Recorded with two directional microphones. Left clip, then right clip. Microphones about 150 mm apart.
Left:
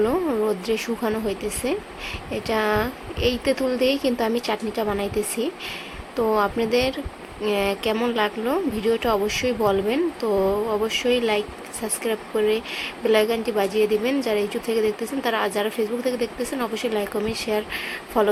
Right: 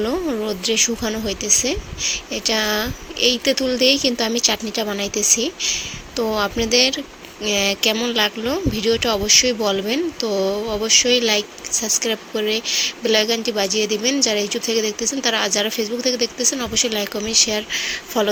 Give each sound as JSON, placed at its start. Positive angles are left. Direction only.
{"t": 0.0, "sound": "speech", "side_deg": -30}